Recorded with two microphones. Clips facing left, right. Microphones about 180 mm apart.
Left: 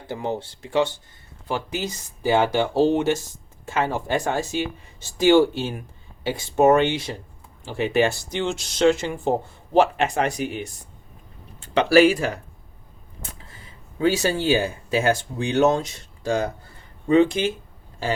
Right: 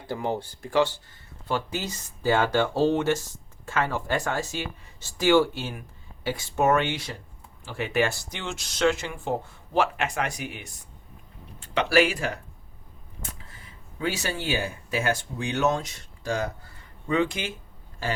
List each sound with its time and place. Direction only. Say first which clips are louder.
0.1 s speech: left 1 dB; 20° left (ahead or behind)
14.0 s speech: left 9 dB; 30° left (ahead or behind)